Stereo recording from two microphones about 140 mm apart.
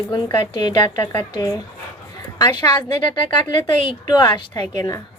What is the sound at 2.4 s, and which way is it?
A woman's voice, 30° left (ahead or behind).